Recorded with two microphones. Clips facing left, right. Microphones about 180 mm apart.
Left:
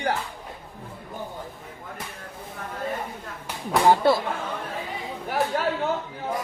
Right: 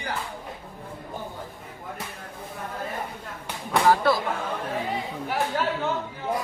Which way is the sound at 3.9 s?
25° left (ahead or behind).